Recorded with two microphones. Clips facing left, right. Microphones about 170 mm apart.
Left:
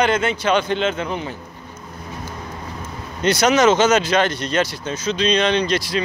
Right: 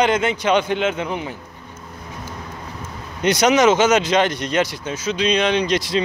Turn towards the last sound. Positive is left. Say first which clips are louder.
# even
turn(degrees=-20)  # may be behind; listen again after turning